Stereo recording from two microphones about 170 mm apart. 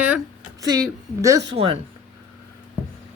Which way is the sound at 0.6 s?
20° right (ahead or behind).